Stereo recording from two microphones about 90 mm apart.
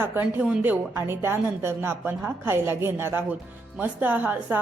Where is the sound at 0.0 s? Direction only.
25° right (ahead or behind).